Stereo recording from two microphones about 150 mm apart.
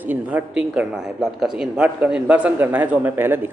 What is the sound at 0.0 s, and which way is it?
Speech, 10° right (ahead or behind).